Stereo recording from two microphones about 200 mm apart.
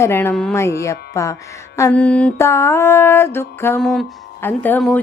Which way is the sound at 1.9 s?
5° left (ahead or behind).